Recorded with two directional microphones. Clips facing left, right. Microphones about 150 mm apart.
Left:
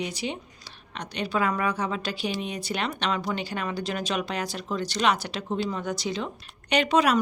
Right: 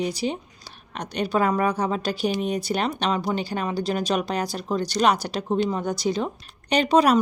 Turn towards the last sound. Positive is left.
turn(degrees=-35)  # may be behind; listen again after turning